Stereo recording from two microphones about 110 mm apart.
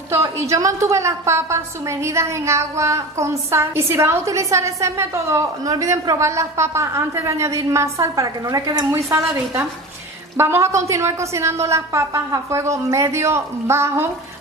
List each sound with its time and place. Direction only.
0.1 s a woman's voice: 25° right (ahead or behind)